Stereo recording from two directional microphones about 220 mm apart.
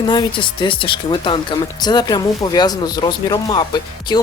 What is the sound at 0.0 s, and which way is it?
Speech, 20° left (ahead or behind).